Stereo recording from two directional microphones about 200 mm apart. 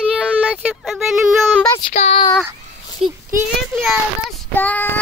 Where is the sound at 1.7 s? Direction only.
30° left (ahead or behind).